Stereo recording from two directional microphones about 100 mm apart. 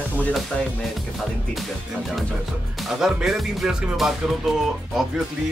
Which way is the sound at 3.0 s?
5° right (ahead or behind).